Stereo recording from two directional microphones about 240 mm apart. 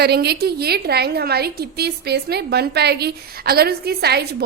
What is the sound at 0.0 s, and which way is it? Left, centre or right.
A woman's voice, right.